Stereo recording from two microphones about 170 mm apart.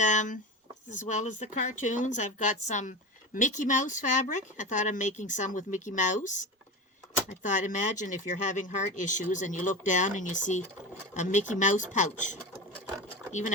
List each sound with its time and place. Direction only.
0.0 s speech: 45° left (ahead or behind)